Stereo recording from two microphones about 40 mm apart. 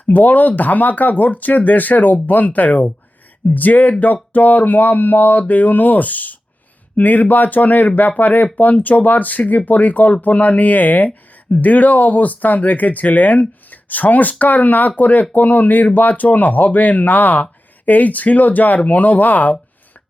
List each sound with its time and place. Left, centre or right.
0.0 s speech: left